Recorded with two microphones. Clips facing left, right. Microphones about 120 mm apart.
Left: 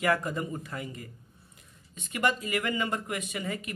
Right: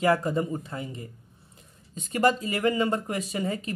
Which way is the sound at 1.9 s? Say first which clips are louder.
Right 6 dB; 35° right (ahead or behind).